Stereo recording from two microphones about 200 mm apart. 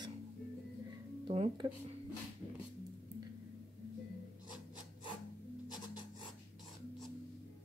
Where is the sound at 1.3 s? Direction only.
30° right (ahead or behind).